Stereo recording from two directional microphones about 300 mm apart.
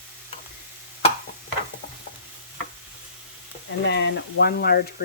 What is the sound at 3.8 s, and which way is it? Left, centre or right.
Speech, left.